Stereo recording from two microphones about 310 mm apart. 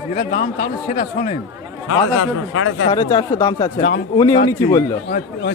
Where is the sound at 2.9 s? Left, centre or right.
Centre.